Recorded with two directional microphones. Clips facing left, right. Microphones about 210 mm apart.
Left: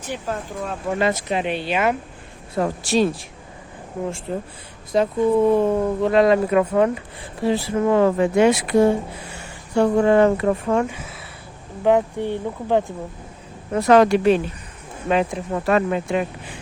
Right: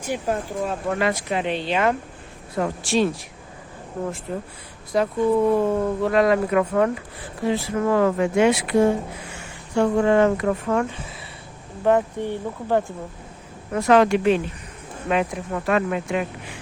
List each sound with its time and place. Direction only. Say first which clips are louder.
0.0 s speech: right 3 dB; 10° right (ahead or behind)
0.9 s speech: left 5 dB; 25° left (ahead or behind)
2.6 s speech: left 2 dB; 35° left (ahead or behind)
4.3 s speech: left 2 dB; 30° left (ahead or behind)
7.4 s speech: left 2 dB; 35° left (ahead or behind)
7.8 s speech: left 3 dB; 20° left (ahead or behind)
11.8 s speech: left 2 dB; 15° left (ahead or behind)
13.7 s speech: left 2 dB; 40° left (ahead or behind)
15.1 s speech: left 2 dB; 30° left (ahead or behind)